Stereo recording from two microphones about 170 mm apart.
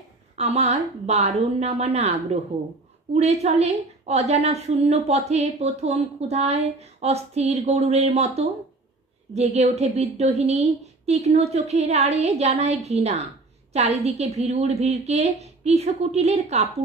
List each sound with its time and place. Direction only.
0.4 s a woman's voice: 40° right (ahead or behind)